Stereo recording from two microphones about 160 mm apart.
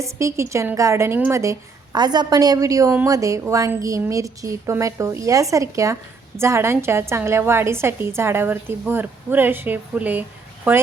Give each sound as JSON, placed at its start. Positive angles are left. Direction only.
{"t": 0.0, "sound": "a woman's voice", "side_deg": -20}